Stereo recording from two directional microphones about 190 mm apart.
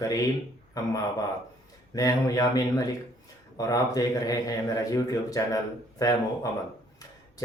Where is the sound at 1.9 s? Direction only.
20° left (ahead or behind).